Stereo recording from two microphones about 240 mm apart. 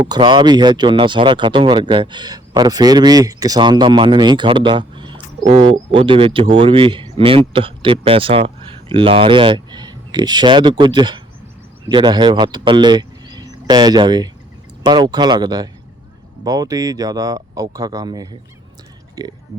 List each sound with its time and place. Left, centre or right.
0.1 s speech: centre